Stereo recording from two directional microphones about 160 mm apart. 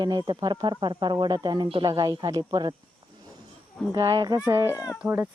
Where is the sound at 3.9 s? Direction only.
25° right (ahead or behind).